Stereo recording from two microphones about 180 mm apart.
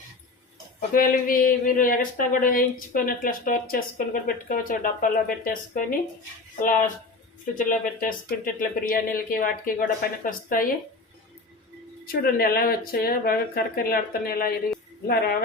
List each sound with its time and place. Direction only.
0.8 s speech: 50° left (ahead or behind)
12.0 s speech: 55° left (ahead or behind)